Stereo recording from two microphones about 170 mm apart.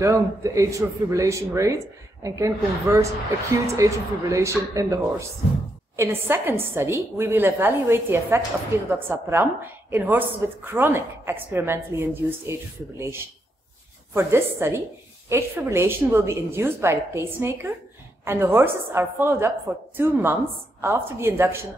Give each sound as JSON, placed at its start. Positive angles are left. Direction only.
{"t": 0.0, "sound": "a woman's voice", "side_deg": -20}